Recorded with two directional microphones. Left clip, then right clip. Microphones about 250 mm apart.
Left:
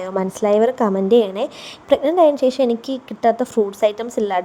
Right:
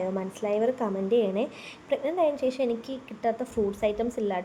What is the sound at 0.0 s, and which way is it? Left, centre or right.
A woman's voice, left.